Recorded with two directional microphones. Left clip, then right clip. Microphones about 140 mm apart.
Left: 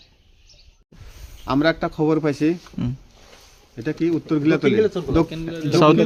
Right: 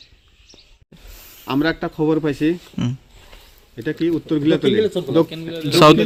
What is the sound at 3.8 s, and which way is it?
Speech, 20° left (ahead or behind).